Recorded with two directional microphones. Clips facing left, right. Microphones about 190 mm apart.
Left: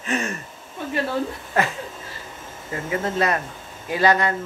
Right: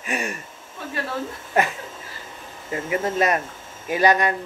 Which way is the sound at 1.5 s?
20° right (ahead or behind).